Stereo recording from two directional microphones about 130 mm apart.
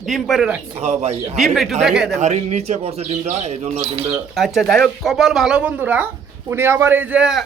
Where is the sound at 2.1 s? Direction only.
65° right (ahead or behind).